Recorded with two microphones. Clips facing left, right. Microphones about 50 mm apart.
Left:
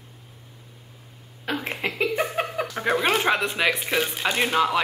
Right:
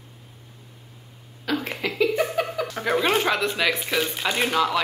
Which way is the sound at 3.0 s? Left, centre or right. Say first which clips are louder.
Even; centre.